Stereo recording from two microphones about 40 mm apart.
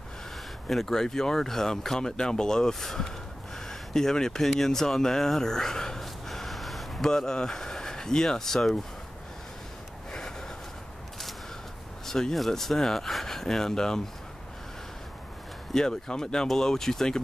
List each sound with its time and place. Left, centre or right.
0.7 s speech: centre
6.2 s gasp: centre
7.1 s speech: centre
12.1 s speech: centre
15.7 s speech: centre